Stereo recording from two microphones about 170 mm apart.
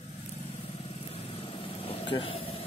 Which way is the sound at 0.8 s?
35° left (ahead or behind).